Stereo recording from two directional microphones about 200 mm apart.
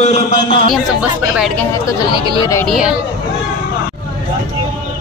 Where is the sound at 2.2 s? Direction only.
20° left (ahead or behind).